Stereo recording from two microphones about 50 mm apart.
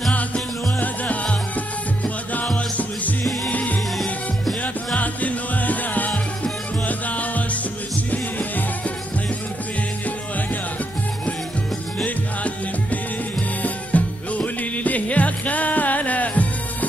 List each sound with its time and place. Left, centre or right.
0.7 s music: left
2.8 s music: left
4.9 s music: left
12.0 s music: left